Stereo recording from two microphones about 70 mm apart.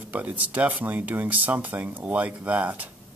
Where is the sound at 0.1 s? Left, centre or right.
Right.